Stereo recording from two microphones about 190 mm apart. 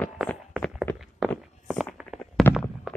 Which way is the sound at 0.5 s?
Centre (ahead or behind).